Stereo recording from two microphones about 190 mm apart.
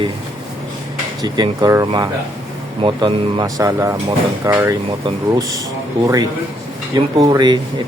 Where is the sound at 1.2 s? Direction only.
20° right (ahead or behind).